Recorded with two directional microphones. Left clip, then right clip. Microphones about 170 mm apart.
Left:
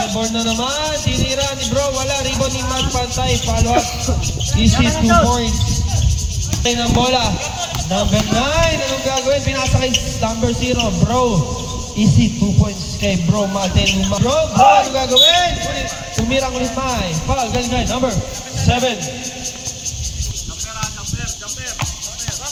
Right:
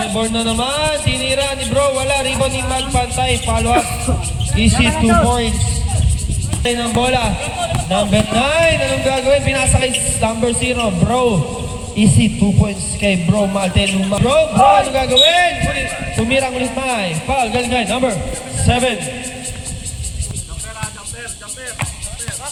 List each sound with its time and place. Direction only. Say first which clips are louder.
0.2 s speech: right 1 dB; 35° right (ahead or behind)
6.7 s speech: even; 35° right (ahead or behind)